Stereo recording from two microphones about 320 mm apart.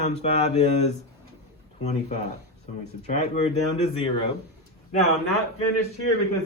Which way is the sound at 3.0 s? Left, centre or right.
Centre.